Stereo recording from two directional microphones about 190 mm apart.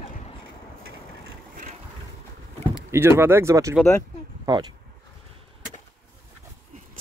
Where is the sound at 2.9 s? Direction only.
15° right (ahead or behind).